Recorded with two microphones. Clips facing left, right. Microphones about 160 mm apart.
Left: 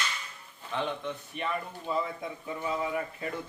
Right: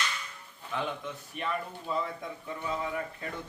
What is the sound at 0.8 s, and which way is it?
Speech, 5° right (ahead or behind).